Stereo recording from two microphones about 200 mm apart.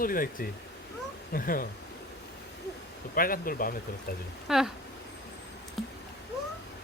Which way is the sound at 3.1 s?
45° left (ahead or behind).